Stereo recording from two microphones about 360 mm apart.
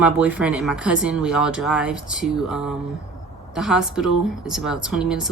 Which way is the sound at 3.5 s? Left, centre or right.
Centre.